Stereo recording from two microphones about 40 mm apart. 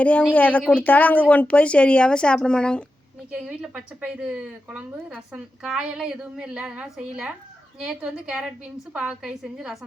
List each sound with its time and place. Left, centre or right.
0.0 s speech: left
3.3 s a woman's voice: right
5.7 s a woman's voice: centre
7.8 s a woman's voice: right